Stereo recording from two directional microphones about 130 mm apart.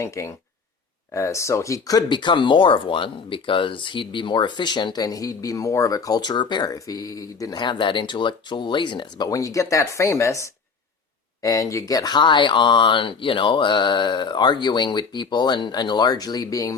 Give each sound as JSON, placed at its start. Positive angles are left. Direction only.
{"t": 0.0, "sound": "speech", "side_deg": 25}